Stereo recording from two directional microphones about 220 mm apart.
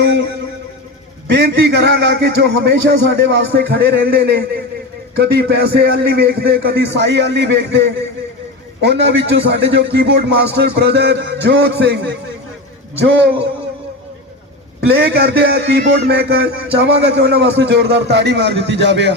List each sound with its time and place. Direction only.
1.3 s a man's voice: 50° right (ahead or behind)
14.8 s a man's voice: 50° right (ahead or behind)